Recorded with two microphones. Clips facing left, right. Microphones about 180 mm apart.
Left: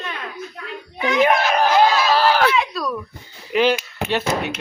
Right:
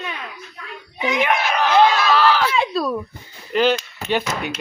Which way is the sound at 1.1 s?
40° left (ahead or behind).